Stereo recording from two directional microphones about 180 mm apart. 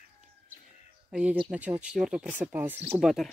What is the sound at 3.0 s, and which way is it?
Speech, centre (ahead or behind).